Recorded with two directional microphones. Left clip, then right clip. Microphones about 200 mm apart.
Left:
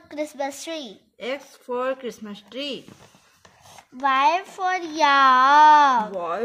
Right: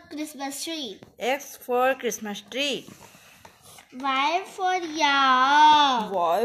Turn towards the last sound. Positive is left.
turn(degrees=55)  # may be behind; listen again after turning